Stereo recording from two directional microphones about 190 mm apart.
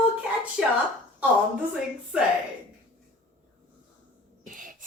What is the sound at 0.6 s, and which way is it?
Speech, centre (ahead or behind).